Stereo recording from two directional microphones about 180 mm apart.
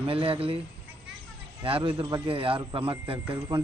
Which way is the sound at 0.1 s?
30° right (ahead or behind).